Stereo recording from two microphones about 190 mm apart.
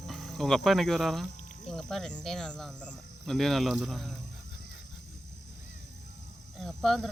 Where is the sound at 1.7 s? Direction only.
Centre (ahead or behind).